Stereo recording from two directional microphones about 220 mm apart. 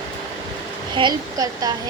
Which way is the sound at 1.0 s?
20° right (ahead or behind).